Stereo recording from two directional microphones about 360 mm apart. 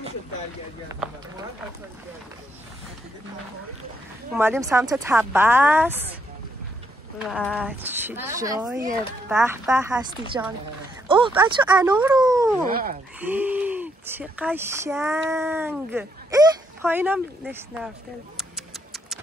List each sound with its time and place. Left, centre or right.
0.8 s speech: centre
4.3 s speech: centre
7.2 s speech: centre
12.6 s speech: right
13.2 s speech: centre